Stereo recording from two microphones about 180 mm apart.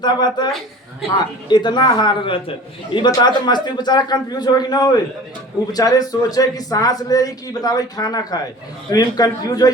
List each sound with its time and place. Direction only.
0.0 s speech: 25° left (ahead or behind)